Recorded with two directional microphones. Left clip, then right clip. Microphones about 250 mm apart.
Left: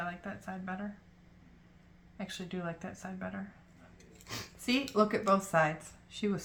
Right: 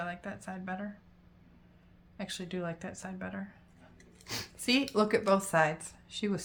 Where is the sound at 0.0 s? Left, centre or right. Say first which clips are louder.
Right 1 dB; right.